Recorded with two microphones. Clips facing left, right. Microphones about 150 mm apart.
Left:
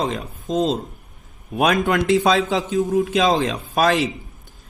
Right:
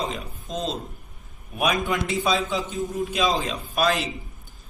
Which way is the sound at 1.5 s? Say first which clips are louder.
Left 6 dB; 90° left.